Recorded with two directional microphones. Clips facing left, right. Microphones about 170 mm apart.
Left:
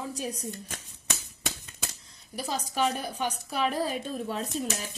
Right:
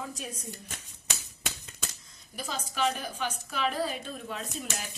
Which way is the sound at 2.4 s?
40° left (ahead or behind).